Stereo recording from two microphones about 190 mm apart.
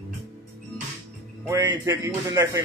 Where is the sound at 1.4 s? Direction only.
20° right (ahead or behind).